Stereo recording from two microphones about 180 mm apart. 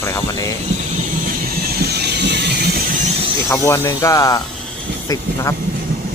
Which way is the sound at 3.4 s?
15° left (ahead or behind).